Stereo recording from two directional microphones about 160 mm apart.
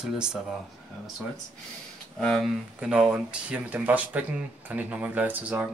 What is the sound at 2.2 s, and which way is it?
Speech, centre (ahead or behind).